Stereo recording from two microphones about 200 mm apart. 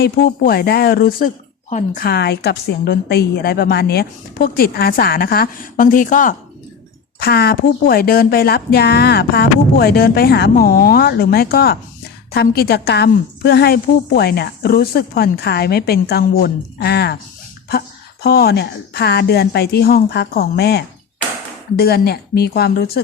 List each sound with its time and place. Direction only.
0.0 s a woman's voice: 50° left (ahead or behind)
7.2 s a woman's voice: 50° left (ahead or behind)